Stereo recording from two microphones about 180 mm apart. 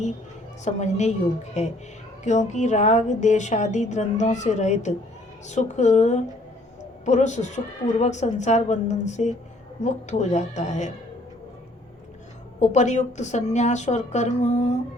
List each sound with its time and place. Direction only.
0.6 s a woman's voice: 40° left (ahead or behind)
12.5 s a woman's voice: 40° left (ahead or behind)